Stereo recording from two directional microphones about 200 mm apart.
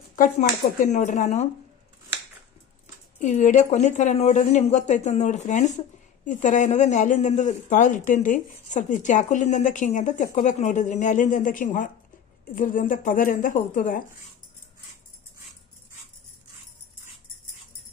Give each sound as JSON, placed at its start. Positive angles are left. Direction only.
{"t": 0.1, "sound": "speech", "side_deg": 40}
{"t": 3.2, "sound": "speech", "side_deg": 40}